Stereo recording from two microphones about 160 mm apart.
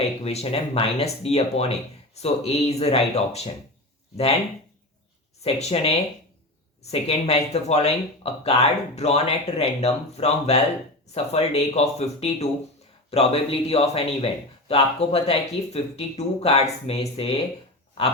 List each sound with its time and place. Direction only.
0.2 s speech: 40° left (ahead or behind)
5.4 s speech: 40° left (ahead or behind)